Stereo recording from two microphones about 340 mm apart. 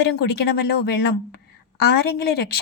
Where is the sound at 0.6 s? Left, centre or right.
Left.